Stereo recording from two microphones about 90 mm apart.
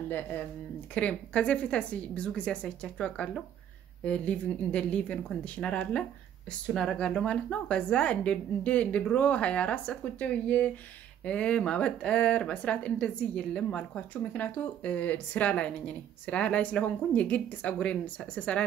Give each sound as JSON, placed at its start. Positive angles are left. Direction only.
{"t": 0.9, "sound": "speech", "side_deg": 15}